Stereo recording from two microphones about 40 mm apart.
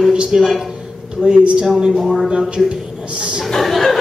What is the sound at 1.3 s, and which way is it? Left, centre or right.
Speech, right.